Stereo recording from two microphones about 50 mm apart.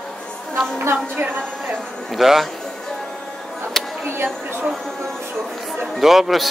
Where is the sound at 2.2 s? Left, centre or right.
Centre.